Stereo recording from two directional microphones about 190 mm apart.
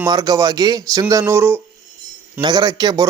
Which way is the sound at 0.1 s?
20° right (ahead or behind).